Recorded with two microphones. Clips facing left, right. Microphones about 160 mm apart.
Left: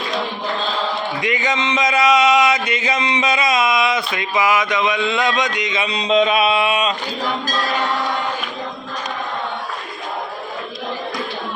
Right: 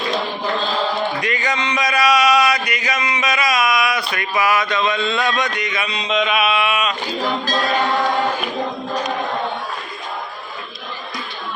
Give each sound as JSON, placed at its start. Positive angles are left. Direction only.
{"t": 1.2, "sound": "speech", "side_deg": 20}